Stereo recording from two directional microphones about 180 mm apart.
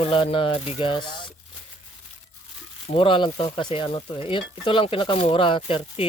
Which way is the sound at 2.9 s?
30° left (ahead or behind).